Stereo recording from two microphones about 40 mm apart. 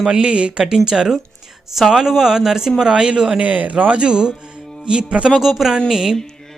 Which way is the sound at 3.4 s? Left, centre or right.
Right.